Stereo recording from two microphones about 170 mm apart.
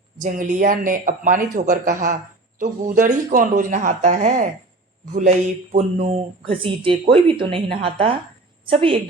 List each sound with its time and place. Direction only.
0.2 s speech: 50° right (ahead or behind); by 9.0 s 30° right (ahead or behind)